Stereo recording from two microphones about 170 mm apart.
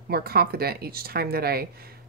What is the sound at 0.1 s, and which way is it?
Speech, 65° right (ahead or behind).